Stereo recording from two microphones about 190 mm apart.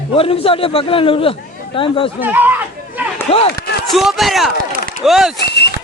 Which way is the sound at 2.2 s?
10° right (ahead or behind).